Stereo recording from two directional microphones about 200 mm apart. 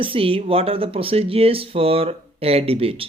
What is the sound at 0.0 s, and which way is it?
Speech, 25° right (ahead or behind).